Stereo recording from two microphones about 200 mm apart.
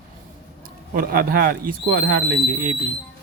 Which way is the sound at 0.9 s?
45° right (ahead or behind).